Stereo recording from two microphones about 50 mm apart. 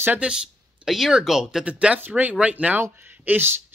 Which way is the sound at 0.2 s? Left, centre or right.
Centre.